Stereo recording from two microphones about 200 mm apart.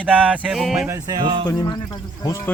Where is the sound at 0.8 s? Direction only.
15° right (ahead or behind).